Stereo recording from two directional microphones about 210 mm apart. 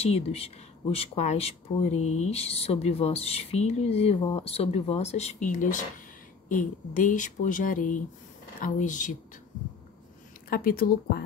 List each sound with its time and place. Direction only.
0.0 s speech: 30° left (ahead or behind)
10.5 s speech: 45° left (ahead or behind)